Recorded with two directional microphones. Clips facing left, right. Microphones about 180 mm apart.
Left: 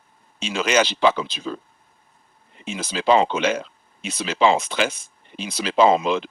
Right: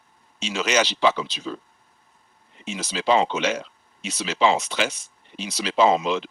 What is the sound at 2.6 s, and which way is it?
Speech, 55° left (ahead or behind).